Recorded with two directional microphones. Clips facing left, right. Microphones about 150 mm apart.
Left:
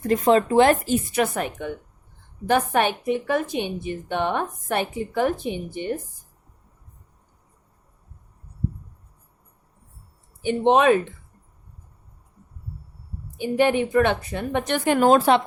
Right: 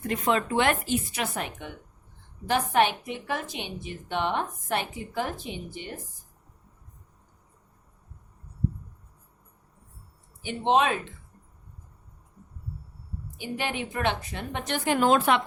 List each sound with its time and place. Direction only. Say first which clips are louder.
0.1 s a woman's voice: left 8 dB; 35° left (ahead or behind)
2.5 s a woman's voice: left 3 dB; 50° left (ahead or behind)
10.4 s speech: left 6 dB; 55° left (ahead or behind)
13.4 s a woman's voice: left 12 dB; 50° left (ahead or behind)